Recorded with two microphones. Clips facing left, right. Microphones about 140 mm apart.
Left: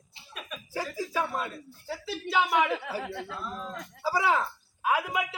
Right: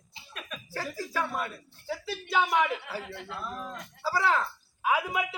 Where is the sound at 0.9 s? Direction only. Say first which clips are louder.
Left 1 dB; 15° left (ahead or behind).